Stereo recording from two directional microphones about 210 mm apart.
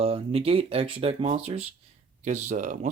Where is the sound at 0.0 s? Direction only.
30° right (ahead or behind).